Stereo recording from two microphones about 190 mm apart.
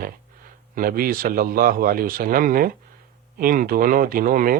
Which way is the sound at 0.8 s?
50° right (ahead or behind).